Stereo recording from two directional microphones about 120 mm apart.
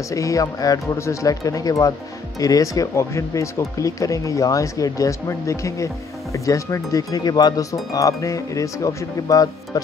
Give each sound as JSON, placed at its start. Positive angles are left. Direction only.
{"t": 0.1, "sound": "speech", "side_deg": 25}